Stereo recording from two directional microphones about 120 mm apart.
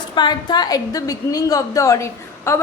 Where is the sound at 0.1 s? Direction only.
40° left (ahead or behind).